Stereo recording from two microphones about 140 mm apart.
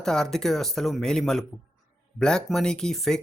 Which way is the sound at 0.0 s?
5° left (ahead or behind).